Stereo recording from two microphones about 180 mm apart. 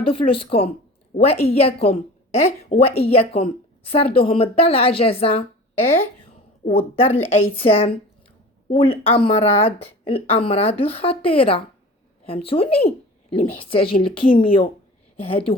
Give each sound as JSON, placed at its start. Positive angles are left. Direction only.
{"t": 0.0, "sound": "a woman's voice", "side_deg": 30}
{"t": 6.7, "sound": "a woman's voice", "side_deg": 35}